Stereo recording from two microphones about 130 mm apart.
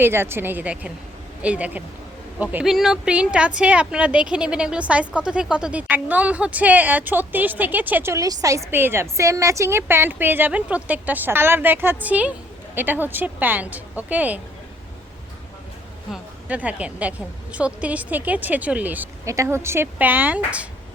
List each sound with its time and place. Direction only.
0.0 s a woman's voice: 20° right (ahead or behind)
16.1 s a woman's voice: 10° right (ahead or behind)
19.2 s speech: 25° right (ahead or behind)